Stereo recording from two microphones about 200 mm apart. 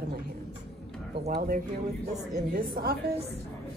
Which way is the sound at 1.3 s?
50° right (ahead or behind).